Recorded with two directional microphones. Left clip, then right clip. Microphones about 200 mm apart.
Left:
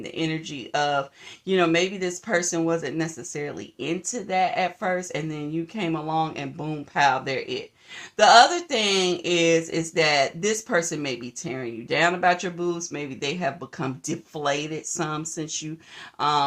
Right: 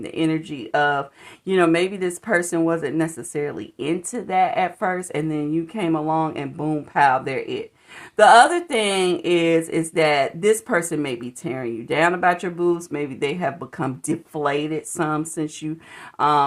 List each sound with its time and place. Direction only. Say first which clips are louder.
0.0 s speech: right 5 dB; 35° right (ahead or behind)